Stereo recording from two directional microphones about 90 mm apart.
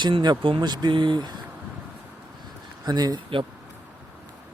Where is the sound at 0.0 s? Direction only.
55° right (ahead or behind).